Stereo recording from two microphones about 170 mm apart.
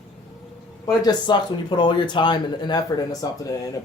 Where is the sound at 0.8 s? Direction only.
25° left (ahead or behind).